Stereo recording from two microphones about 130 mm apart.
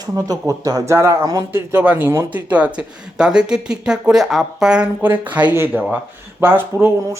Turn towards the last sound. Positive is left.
turn(degrees=-20)  # may be behind; listen again after turning